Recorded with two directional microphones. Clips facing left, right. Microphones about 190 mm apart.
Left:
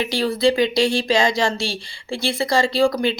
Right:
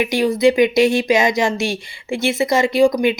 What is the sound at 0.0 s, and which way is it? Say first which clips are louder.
Speech: right 4 dB; 15° right (ahead or behind).